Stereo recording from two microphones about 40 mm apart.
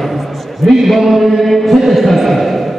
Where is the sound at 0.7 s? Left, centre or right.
Centre.